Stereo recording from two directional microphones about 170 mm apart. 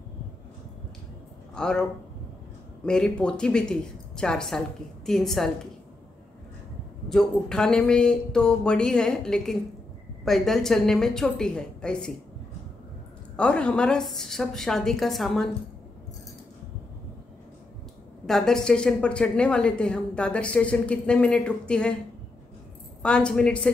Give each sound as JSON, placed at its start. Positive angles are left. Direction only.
{"t": 1.5, "sound": "a woman's voice", "side_deg": 5}
{"t": 7.1, "sound": "a woman's voice", "side_deg": 5}
{"t": 13.4, "sound": "a woman's voice", "side_deg": 5}
{"t": 18.2, "sound": "a woman's voice", "side_deg": 0}
{"t": 23.0, "sound": "a woman's voice", "side_deg": 5}